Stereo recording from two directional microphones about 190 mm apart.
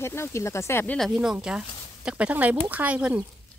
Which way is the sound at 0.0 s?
15° left (ahead or behind).